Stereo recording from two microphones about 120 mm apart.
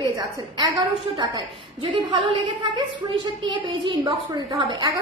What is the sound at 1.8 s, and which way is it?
Speech, 45° right (ahead or behind).